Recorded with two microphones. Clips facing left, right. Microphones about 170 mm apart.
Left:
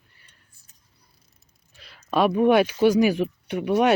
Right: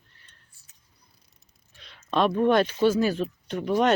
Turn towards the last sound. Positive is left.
turn(degrees=10)  # may be behind; listen again after turning